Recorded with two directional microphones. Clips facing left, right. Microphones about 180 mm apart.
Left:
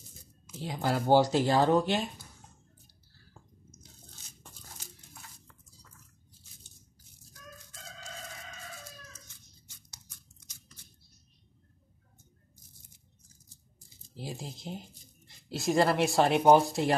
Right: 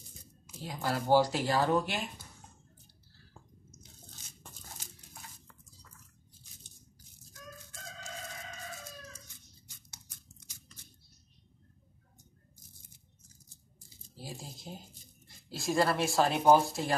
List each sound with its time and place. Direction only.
0.6 s speech: 25° left (ahead or behind)
14.1 s a sound: 20° left (ahead or behind)
15.2 s speech: 20° left (ahead or behind)